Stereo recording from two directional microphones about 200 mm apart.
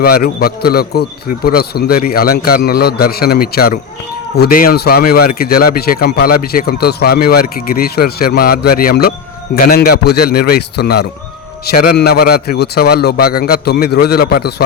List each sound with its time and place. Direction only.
0.0 s speech: 50° left (ahead or behind)